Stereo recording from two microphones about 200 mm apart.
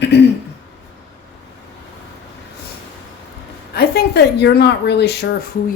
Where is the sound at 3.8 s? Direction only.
55° left (ahead or behind).